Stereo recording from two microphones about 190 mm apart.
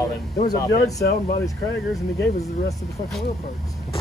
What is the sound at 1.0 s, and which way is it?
Speech, 50° left (ahead or behind).